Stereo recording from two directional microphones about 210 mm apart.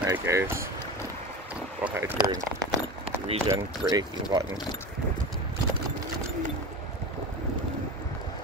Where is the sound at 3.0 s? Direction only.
30° right (ahead or behind).